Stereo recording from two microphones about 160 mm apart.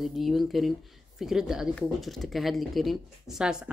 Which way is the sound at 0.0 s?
Centre (ahead or behind).